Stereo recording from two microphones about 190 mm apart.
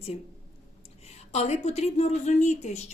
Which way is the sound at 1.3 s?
35° left (ahead or behind).